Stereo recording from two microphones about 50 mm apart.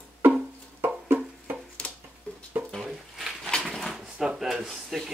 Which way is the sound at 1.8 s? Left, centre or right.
Left.